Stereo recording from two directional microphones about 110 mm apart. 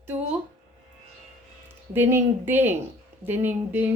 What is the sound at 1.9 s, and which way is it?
A woman's voice, 20° right (ahead or behind).